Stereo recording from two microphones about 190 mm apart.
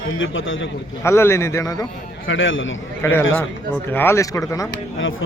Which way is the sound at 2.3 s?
90° left.